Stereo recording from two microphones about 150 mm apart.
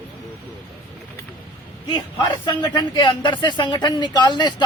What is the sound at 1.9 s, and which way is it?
Speech, 30° left (ahead or behind).